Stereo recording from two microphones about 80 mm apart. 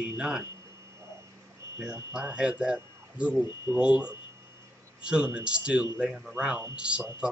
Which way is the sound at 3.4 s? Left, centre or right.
Right.